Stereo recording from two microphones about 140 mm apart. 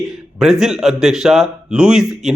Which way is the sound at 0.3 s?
5° right (ahead or behind).